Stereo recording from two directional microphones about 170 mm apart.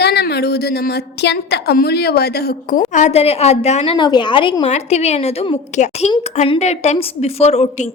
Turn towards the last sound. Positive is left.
turn(degrees=40)  # may be behind; listen again after turning